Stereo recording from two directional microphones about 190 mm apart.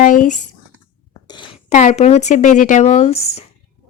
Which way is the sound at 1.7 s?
40° left (ahead or behind).